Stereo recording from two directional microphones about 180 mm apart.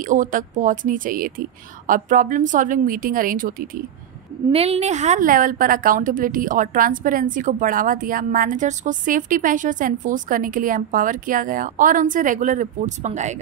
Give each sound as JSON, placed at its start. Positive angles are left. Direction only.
{"t": 0.0, "sound": "a woman's voice", "side_deg": -45}
{"t": 4.5, "sound": "a woman's voice", "side_deg": -35}